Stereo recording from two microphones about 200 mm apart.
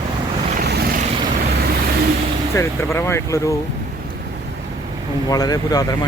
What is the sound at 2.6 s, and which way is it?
Speech, 15° left (ahead or behind).